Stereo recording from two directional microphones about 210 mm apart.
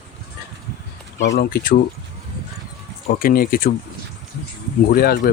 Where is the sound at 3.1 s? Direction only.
45° left (ahead or behind).